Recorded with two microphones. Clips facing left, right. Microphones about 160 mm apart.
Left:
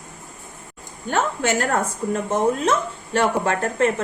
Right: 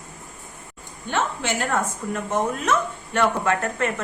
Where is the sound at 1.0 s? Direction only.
45° left (ahead or behind).